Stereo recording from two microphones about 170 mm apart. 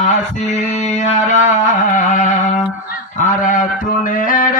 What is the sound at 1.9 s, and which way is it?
Music, 45° left (ahead or behind).